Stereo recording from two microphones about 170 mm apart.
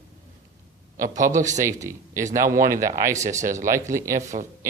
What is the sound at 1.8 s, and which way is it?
Speech, 15° right (ahead or behind).